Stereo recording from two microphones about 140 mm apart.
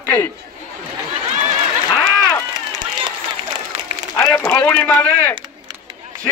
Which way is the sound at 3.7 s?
50° right (ahead or behind).